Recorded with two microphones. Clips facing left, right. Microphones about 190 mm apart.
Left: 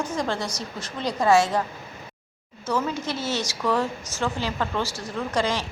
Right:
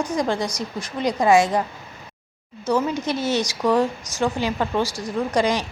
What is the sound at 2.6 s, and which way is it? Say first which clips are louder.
A woman's voice: right 5 dB; 15° right (ahead or behind).